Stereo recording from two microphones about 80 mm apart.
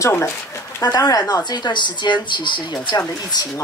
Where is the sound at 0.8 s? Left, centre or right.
Left.